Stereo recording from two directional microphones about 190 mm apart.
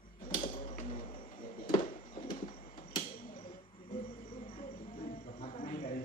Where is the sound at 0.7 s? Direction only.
30° left (ahead or behind).